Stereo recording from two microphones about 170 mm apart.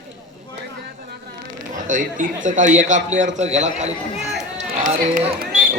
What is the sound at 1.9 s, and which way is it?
A man's voice, 50° right (ahead or behind).